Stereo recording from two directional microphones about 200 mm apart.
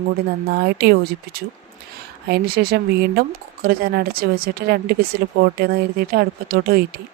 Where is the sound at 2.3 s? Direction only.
50° right (ahead or behind).